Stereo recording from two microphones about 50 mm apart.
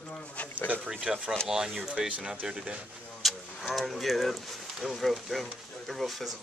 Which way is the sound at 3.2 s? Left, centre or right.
Centre.